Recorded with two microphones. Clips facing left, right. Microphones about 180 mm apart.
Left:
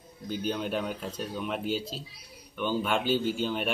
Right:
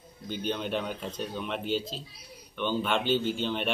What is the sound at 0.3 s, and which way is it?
A man's voice, 5° left (ahead or behind).